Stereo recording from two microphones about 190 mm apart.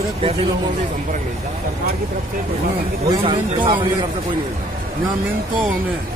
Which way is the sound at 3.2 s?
25° right (ahead or behind).